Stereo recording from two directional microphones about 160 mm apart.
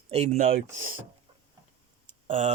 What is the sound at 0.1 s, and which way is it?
Speech, 45° right (ahead or behind).